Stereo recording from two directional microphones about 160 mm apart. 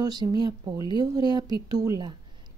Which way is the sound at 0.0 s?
25° right (ahead or behind).